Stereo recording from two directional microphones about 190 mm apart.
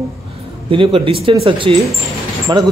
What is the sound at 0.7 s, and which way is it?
Speech, 30° right (ahead or behind).